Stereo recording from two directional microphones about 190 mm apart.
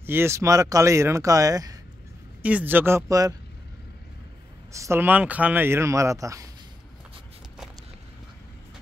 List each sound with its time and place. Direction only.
0.0 s speech: 10° right (ahead or behind)
2.4 s speech: 10° right (ahead or behind)
4.7 s speech: 15° right (ahead or behind)